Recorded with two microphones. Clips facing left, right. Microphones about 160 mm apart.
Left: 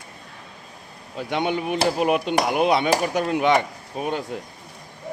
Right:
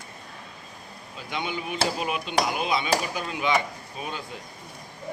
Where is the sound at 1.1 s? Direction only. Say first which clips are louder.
Left 8 dB; 65° left (ahead or behind).